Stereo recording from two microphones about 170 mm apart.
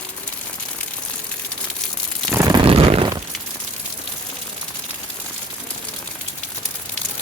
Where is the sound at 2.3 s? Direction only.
20° right (ahead or behind).